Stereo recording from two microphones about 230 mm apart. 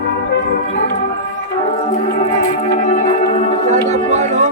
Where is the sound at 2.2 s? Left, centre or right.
Left.